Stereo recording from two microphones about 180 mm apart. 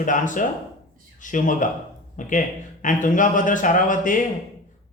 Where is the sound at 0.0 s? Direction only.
45° left (ahead or behind).